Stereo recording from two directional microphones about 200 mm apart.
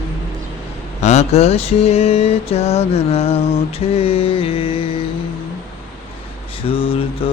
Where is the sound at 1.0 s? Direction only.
35° left (ahead or behind).